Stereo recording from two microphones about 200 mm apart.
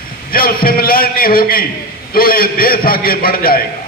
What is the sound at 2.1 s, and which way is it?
A man's voice, 50° left (ahead or behind).